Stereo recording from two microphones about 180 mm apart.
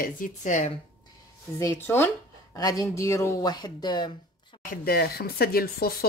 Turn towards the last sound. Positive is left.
turn(degrees=60)  # may be behind; listen again after turning